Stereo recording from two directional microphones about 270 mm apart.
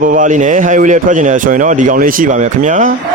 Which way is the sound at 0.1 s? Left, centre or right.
Right.